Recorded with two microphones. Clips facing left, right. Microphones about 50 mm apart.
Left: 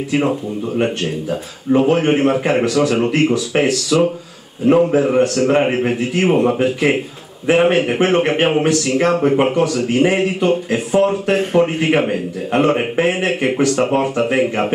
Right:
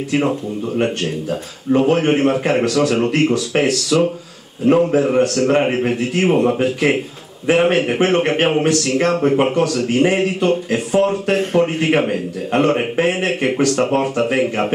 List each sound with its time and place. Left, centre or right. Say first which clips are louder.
0.1 s a man's voice: even; centre